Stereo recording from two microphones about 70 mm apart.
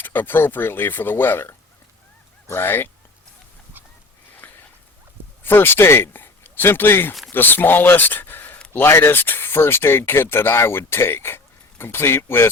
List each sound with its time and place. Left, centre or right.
0.0 s speech: left
4.4 s a sound: left
5.4 s speech: left